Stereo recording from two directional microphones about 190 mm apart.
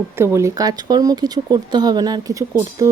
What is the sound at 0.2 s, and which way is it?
Speech, 15° right (ahead or behind).